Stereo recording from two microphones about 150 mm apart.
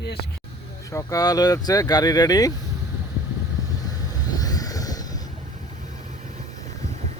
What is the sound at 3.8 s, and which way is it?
Vehicle, 25° left (ahead or behind).